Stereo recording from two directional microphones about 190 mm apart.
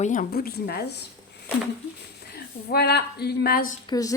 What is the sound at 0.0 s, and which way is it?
Speech, 45° left (ahead or behind).